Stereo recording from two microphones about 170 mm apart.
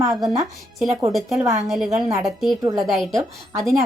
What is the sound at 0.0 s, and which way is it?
Speech, 20° right (ahead or behind).